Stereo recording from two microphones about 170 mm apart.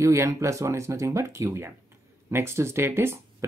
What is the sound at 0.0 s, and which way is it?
Speech, 20° right (ahead or behind).